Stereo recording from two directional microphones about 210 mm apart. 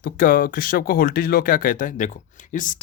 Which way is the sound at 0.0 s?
40° left (ahead or behind).